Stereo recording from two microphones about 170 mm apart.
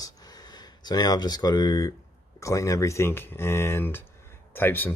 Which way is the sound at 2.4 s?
20° left (ahead or behind).